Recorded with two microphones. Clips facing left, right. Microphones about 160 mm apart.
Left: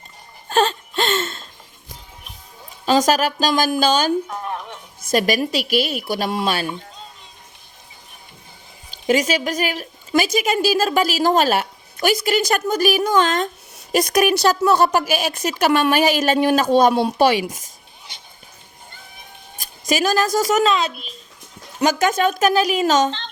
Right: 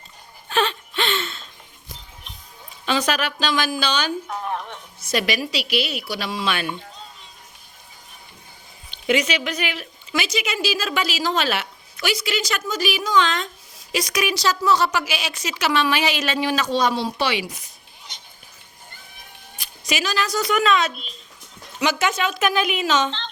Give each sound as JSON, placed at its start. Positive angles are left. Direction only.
{"t": 0.4, "sound": "a sound", "side_deg": 40}
{"t": 2.8, "sound": "speech", "side_deg": 40}
{"t": 4.3, "sound": "a sound", "side_deg": 5}
{"t": 5.1, "sound": "speech", "side_deg": 45}
{"t": 8.9, "sound": "speech", "side_deg": 40}
{"t": 19.9, "sound": "a woman's voice", "side_deg": 45}
{"t": 21.8, "sound": "speech", "side_deg": 45}